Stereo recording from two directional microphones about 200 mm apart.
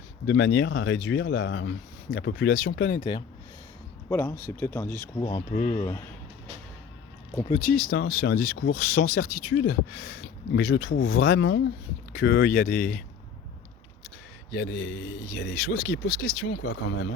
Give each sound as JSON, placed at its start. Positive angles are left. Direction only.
{"t": 0.3, "sound": "speech", "side_deg": 60}
{"t": 3.0, "sound": "speech", "side_deg": 25}
{"t": 4.1, "sound": "speech", "side_deg": 10}
{"t": 5.2, "sound": "speech", "side_deg": 25}
{"t": 5.7, "sound": "speech", "side_deg": 15}
{"t": 7.4, "sound": "speech", "side_deg": 35}
{"t": 7.9, "sound": "speech", "side_deg": 50}
{"t": 10.1, "sound": "speech", "side_deg": 60}
{"t": 14.5, "sound": "speech", "side_deg": 55}